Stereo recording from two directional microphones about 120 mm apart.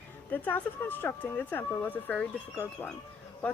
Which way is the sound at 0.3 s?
15° left (ahead or behind).